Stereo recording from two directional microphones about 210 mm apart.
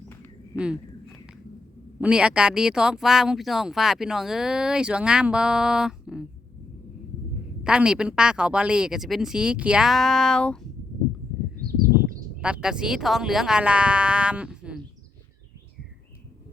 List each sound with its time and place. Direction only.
2.0 s speech: 5° right (ahead or behind)
7.6 s speech: 5° right (ahead or behind)
11.6 s a sound: 45° right (ahead or behind)
12.4 s speech: 5° right (ahead or behind)